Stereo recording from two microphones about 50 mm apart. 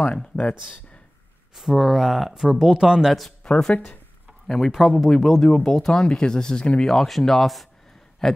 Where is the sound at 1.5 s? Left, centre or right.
Centre.